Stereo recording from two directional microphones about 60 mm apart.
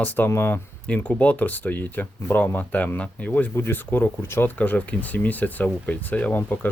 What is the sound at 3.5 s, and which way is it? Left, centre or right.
Speech, left.